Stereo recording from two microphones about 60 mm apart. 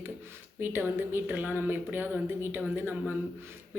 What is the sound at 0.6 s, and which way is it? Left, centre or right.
Speech, right.